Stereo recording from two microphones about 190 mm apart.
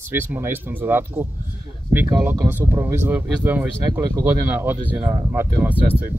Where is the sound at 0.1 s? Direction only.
10° right (ahead or behind).